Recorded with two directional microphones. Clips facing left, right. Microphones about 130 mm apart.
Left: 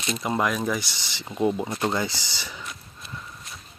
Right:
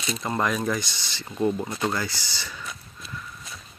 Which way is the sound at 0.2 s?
10° left (ahead or behind).